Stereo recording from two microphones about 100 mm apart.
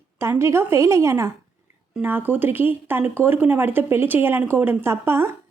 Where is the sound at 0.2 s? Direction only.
25° right (ahead or behind).